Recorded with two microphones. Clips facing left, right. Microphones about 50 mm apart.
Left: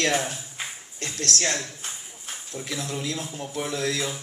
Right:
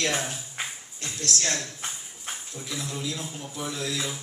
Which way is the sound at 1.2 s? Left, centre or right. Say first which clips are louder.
Left 3 dB; left.